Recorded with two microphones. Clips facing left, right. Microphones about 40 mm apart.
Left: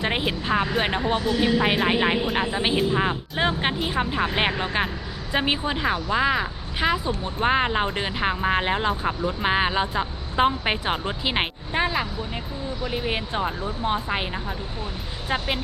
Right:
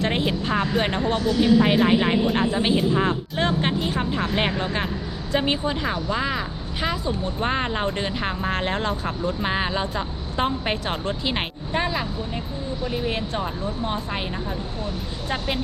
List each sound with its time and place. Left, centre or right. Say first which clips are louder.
0.0 s speech: right 2 dB; centre
15.3 s speech: left 1 dB; centre